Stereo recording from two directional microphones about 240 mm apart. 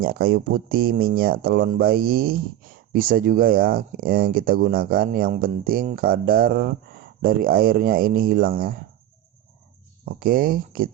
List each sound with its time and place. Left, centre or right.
0.0 s speech: right
10.1 s speech: right